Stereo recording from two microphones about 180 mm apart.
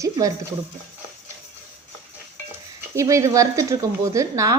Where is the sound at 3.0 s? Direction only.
15° right (ahead or behind).